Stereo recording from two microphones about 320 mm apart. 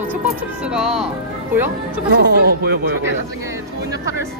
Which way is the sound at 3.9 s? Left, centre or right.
Centre.